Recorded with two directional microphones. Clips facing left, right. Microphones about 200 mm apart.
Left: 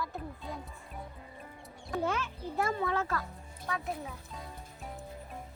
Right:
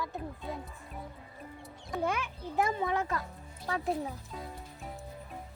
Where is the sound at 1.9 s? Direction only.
15° right (ahead or behind).